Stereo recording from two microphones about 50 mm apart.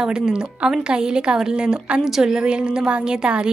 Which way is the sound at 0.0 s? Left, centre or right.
Centre.